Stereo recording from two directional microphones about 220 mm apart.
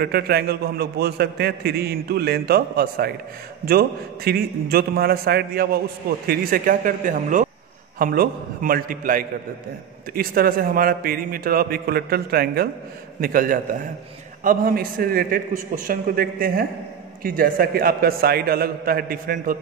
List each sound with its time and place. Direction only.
0.0 s a man's voice: 45° right (ahead or behind)